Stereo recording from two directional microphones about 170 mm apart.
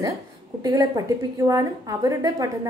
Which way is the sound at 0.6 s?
25° right (ahead or behind).